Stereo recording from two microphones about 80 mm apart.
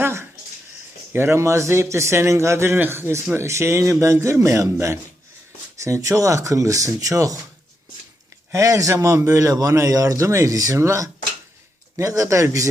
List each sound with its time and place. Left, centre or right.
0.0 s a sound: right
1.1 s a man's voice: right
8.5 s a man's voice: right